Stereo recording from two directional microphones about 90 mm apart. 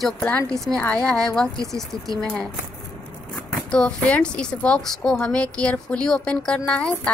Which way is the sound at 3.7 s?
10° left (ahead or behind).